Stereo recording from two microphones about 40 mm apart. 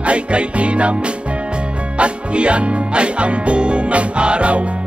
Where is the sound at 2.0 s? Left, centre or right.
Right.